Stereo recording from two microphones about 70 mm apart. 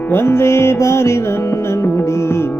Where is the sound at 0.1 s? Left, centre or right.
Left.